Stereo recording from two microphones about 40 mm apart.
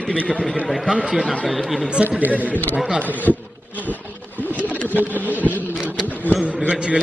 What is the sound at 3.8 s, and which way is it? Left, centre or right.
Bee, left.